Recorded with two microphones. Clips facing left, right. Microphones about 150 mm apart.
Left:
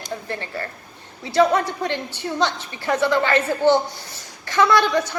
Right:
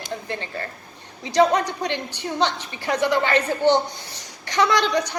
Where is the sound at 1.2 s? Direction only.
15° right (ahead or behind).